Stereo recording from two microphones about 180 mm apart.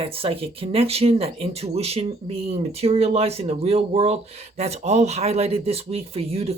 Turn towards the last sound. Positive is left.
turn(degrees=-35)  # may be behind; listen again after turning